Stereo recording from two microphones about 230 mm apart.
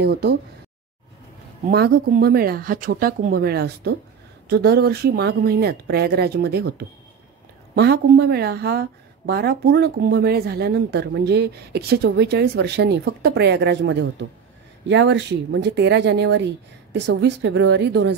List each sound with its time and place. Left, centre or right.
0.0 s speech: right
1.7 s speech: right